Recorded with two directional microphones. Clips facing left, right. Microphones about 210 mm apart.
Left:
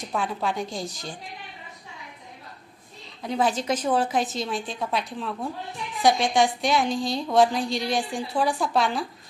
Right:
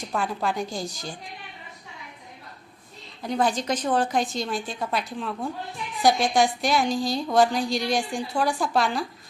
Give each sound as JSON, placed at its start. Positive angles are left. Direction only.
{"t": 0.1, "sound": "a woman's voice", "side_deg": 0}
{"t": 3.2, "sound": "a woman's voice", "side_deg": 5}